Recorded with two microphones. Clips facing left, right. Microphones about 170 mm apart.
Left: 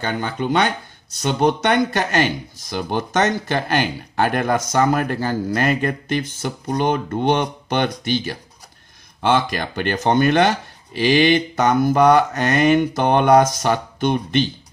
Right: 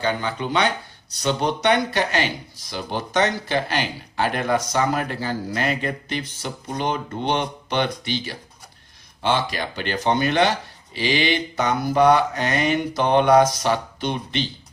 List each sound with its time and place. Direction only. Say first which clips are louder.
0.0 s speech: left 1 dB; 50° left (ahead or behind)